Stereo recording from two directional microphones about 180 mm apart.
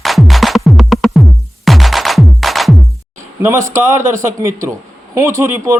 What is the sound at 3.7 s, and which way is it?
Speech, 15° right (ahead or behind).